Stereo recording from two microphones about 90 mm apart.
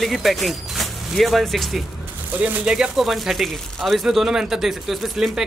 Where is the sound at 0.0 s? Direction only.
Centre (ahead or behind).